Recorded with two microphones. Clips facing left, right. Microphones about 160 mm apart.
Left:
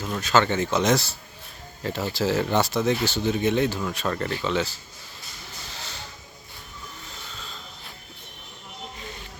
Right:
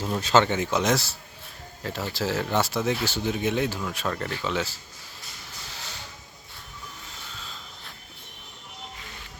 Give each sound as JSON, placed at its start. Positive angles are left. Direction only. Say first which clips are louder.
{"t": 0.0, "sound": "speech", "louder": "right 1 dB", "side_deg": -30}
{"t": 0.4, "sound": "speech", "louder": "left 2 dB", "side_deg": -10}